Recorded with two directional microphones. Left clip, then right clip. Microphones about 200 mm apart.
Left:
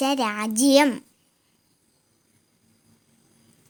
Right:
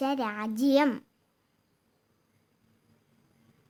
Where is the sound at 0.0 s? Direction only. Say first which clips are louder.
Left 7 dB; 15° left (ahead or behind).